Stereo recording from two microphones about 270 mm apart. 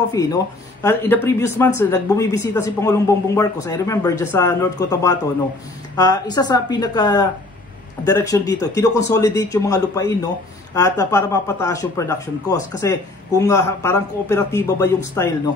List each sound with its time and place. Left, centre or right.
0.1 s speech: centre